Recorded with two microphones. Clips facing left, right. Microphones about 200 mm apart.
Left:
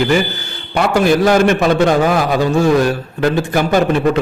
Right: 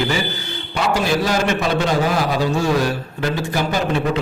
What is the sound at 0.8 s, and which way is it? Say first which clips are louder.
A man's voice: left 6 dB; 55° left (ahead or behind).